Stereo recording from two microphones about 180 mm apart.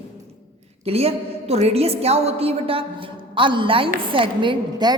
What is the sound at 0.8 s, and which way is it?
A woman's voice, 35° right (ahead or behind).